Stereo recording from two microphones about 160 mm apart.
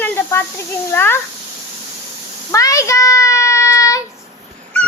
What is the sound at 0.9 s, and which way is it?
Speech, 15° left (ahead or behind).